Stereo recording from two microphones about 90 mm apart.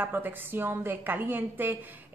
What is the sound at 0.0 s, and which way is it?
A woman's voice, 20° right (ahead or behind).